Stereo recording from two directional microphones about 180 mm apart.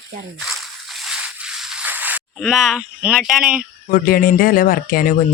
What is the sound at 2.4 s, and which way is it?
Speech, centre (ahead or behind).